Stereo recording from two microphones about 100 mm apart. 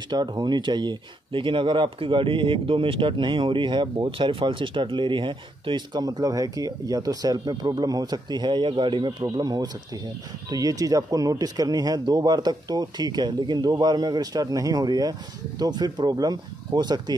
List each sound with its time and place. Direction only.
0.1 s speech: 45° right (ahead or behind)